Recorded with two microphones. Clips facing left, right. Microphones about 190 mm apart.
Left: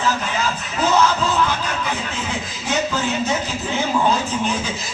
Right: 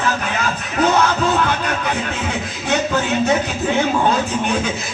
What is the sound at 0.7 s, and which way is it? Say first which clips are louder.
Music: right 2 dB; 60° right (ahead or behind).